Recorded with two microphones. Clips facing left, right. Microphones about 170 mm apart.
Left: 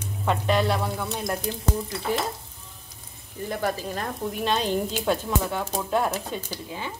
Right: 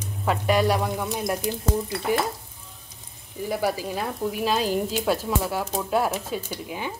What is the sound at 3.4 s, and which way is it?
Speech, 10° right (ahead or behind).